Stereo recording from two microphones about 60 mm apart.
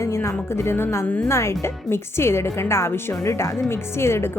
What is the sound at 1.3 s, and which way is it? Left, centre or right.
Speech, left.